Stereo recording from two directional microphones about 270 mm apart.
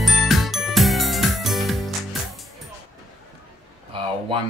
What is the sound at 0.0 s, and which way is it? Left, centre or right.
Music, centre.